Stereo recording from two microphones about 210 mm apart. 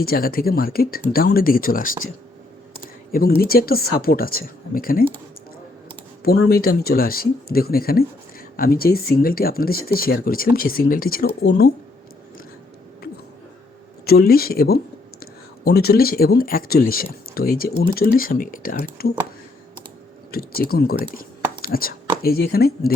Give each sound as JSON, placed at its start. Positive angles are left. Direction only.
{"t": 0.0, "sound": "speech", "side_deg": 45}
{"t": 6.5, "sound": "speech", "side_deg": 45}
{"t": 14.0, "sound": "speech", "side_deg": 45}
{"t": 20.3, "sound": "speech", "side_deg": 45}